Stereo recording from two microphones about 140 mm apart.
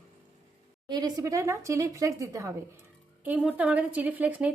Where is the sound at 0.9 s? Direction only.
30° right (ahead or behind).